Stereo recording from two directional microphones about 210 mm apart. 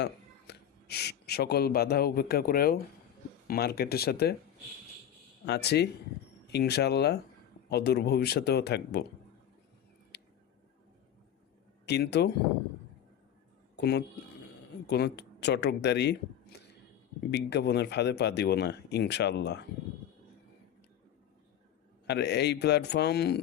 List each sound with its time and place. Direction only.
0.0 s speech: 50° left (ahead or behind)
5.5 s speech: 50° left (ahead or behind)
10.1 s a sound: 55° left (ahead or behind)
11.9 s speech: 50° left (ahead or behind)
13.7 s a man's voice: 50° left (ahead or behind)
22.0 s speech: 55° left (ahead or behind)